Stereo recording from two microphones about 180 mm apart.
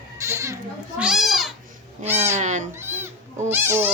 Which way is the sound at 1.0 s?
5° right (ahead or behind).